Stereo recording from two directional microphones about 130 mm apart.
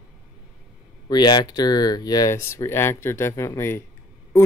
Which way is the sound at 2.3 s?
20° left (ahead or behind).